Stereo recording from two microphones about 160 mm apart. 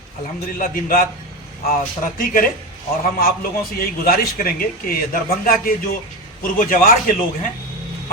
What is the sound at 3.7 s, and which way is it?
A man's voice, 65° left (ahead or behind).